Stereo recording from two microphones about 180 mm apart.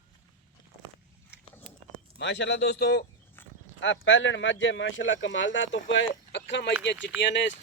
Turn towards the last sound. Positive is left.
turn(degrees=75)  # may be behind; listen again after turning